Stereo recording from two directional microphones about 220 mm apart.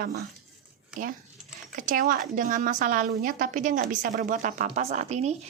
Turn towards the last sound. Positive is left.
turn(degrees=-30)  # may be behind; listen again after turning